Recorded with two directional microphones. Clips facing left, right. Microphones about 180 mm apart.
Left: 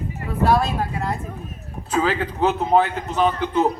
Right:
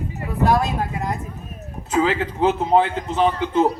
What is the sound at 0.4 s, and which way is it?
A man's voice, 15° right (ahead or behind).